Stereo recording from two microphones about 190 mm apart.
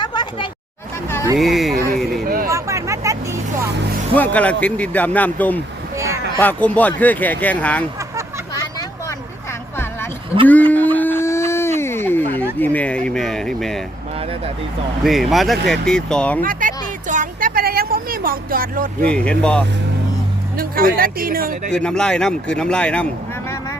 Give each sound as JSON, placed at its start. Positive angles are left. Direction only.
{"t": 0.0, "sound": "a sound", "side_deg": 25}
{"t": 1.4, "sound": "speech", "side_deg": 0}
{"t": 2.2, "sound": "a sound", "side_deg": -50}
{"t": 2.5, "sound": "vehicle", "side_deg": -15}
{"t": 4.1, "sound": "speech", "side_deg": 10}
{"t": 10.4, "sound": "speech", "side_deg": 10}
{"t": 10.9, "sound": "a sound", "side_deg": 10}
{"t": 12.5, "sound": "speech", "side_deg": 10}
{"t": 15.0, "sound": "speech", "side_deg": 0}
{"t": 16.4, "sound": "a sound", "side_deg": -45}
{"t": 19.0, "sound": "speech", "side_deg": 5}
{"t": 20.6, "sound": "speech", "side_deg": -50}
{"t": 21.7, "sound": "speech", "side_deg": 5}